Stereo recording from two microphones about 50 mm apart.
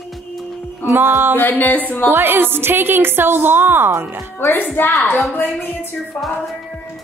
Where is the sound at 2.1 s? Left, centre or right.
Right.